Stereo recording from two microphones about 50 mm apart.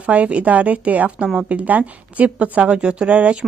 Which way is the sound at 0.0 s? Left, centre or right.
Right.